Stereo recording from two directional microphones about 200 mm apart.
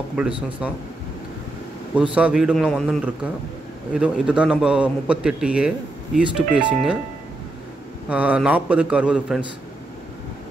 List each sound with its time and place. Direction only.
0.2 s a man's voice: 5° right (ahead or behind)
2.0 s a man's voice: 5° right (ahead or behind)
8.1 s a man's voice: 5° right (ahead or behind)